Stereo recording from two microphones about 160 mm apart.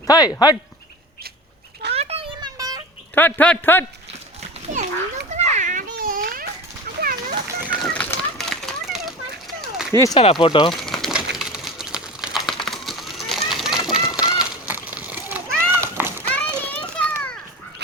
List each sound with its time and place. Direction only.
0.1 s speech: 25° left (ahead or behind)
1.9 s children playing: 40° right (ahead or behind); by 2.8 s 25° right (ahead or behind)
3.2 s a man's voice: 10° left (ahead or behind)
4.7 s a child's voice: 50° right (ahead or behind)
5.3 s children playing: 45° right (ahead or behind)
6.8 s dog: 65° right (ahead or behind)
7.6 s a sound: 10° right (ahead or behind)
7.9 s children playing: 5° left (ahead or behind)
9.9 s speech: 20° left (ahead or behind)
10.2 s speech: 30° left (ahead or behind)
10.8 s a sound: centre (ahead or behind); by 16.2 s 15° right (ahead or behind)
16.3 s children playing: 10° left (ahead or behind)